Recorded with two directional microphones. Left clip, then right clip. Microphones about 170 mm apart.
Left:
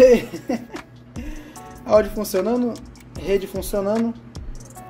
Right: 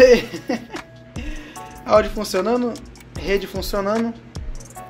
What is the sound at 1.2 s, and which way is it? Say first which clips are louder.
Music: right 3 dB; 20° left (ahead or behind).